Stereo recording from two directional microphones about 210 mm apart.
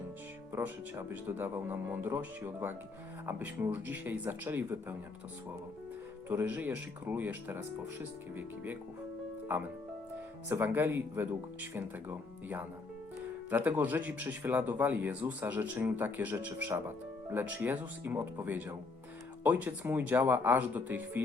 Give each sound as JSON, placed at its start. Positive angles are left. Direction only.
{"t": 0.5, "sound": "speech", "side_deg": -10}
{"t": 6.2, "sound": "speech", "side_deg": -10}
{"t": 10.5, "sound": "speech", "side_deg": -10}